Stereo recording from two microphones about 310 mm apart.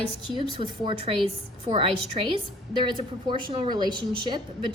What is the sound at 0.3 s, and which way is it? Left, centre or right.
A woman's voice, centre.